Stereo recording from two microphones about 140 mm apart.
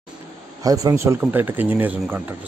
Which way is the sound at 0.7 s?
20° right (ahead or behind).